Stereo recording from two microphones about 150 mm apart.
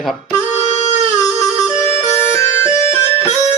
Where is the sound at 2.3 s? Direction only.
15° left (ahead or behind).